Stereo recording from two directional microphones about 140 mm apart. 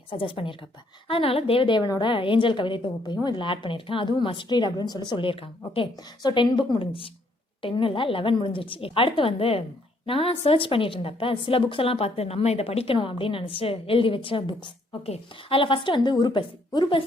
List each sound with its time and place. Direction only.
0.1 s a woman's voice: 40° left (ahead or behind)